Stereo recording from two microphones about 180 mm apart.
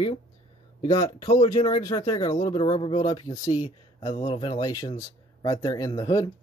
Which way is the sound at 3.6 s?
30° left (ahead or behind).